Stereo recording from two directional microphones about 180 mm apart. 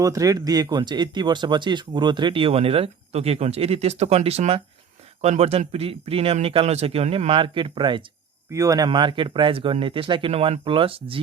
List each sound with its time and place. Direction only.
0.0 s speech: 20° right (ahead or behind)